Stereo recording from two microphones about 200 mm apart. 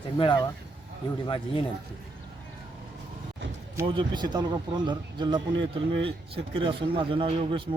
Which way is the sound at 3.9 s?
25° right (ahead or behind).